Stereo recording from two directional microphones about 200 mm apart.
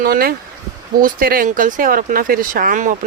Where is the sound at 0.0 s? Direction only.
50° right (ahead or behind).